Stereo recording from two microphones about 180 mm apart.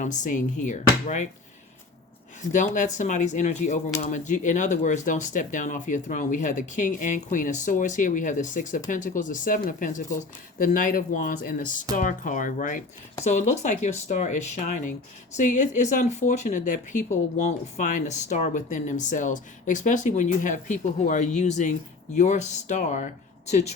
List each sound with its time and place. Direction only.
0.0 s speech: 45° left (ahead or behind)
2.5 s speech: 45° left (ahead or behind)